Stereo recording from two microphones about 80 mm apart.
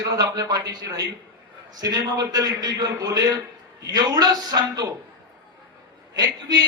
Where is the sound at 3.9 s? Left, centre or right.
Right.